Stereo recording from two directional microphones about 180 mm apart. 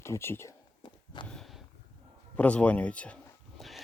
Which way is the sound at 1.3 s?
Centre (ahead or behind).